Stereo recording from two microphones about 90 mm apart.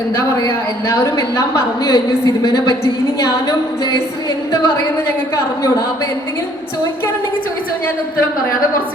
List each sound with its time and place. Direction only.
0.4 s a woman's voice: 30° left (ahead or behind)